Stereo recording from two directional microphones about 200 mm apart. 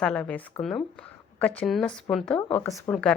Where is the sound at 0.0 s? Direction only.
5° left (ahead or behind).